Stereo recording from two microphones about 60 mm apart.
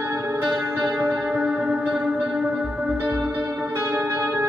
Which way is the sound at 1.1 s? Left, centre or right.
Right.